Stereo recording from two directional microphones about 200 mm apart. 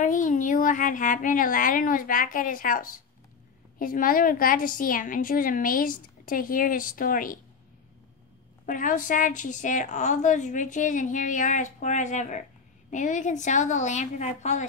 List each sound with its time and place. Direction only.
0.0 s a woman's voice: 40° left (ahead or behind)
8.6 s a woman's voice: 40° left (ahead or behind)